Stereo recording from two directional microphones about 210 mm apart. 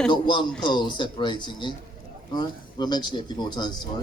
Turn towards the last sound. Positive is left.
turn(degrees=20)  # may be behind; listen again after turning